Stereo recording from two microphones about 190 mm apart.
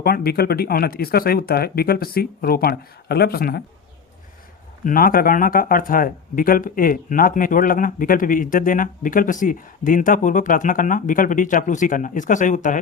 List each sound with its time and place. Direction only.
0.0 s speech: 50° left (ahead or behind)
4.8 s speech: 45° left (ahead or behind)